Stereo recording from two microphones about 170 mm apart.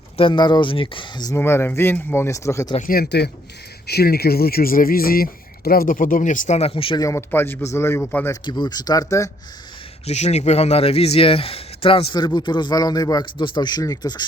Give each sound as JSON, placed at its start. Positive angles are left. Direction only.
{"t": 0.2, "sound": "a man's voice", "side_deg": 30}
{"t": 1.4, "sound": "speech", "side_deg": 15}
{"t": 2.7, "sound": "speech", "side_deg": 55}
{"t": 7.0, "sound": "speech", "side_deg": 15}
{"t": 8.4, "sound": "a man's voice", "side_deg": 25}
{"t": 10.1, "sound": "a man's voice", "side_deg": 40}